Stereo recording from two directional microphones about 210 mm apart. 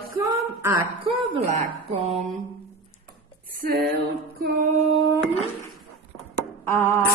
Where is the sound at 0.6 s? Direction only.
15° right (ahead or behind).